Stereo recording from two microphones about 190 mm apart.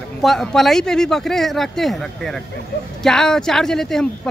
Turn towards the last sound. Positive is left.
turn(degrees=0)  # may be behind; listen again after turning